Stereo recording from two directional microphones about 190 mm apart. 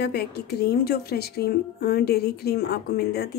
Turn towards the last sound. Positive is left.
turn(degrees=55)  # may be behind; listen again after turning